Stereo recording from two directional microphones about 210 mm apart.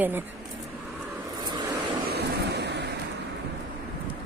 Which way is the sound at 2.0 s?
50° right (ahead or behind).